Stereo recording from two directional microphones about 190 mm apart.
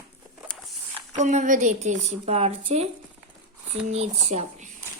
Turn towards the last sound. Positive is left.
turn(degrees=-35)  # may be behind; listen again after turning